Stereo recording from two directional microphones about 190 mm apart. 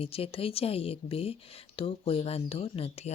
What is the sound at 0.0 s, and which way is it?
Speech, 30° left (ahead or behind).